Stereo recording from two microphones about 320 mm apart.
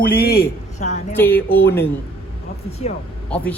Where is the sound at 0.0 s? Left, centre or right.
Left.